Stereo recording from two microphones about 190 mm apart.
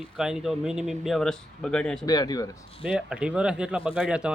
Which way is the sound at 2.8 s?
5° right (ahead or behind).